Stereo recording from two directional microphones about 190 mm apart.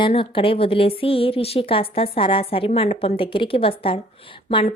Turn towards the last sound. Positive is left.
turn(degrees=30)  # may be behind; listen again after turning